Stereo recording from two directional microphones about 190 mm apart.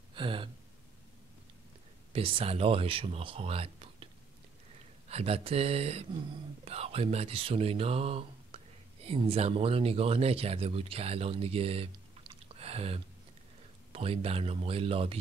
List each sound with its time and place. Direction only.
0.1 s gasp: 25° right (ahead or behind)
2.1 s speech: 30° right (ahead or behind)
5.1 s speech: 30° right (ahead or behind)